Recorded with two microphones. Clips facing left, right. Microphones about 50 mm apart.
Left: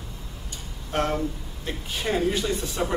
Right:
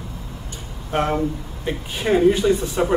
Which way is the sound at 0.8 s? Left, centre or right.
Centre.